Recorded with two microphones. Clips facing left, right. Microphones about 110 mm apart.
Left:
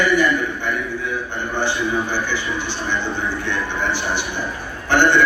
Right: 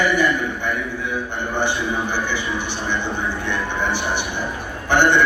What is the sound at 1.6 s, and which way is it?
A man's voice, 15° right (ahead or behind).